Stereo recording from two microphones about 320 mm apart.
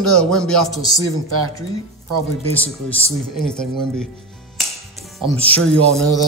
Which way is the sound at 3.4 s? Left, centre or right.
Centre.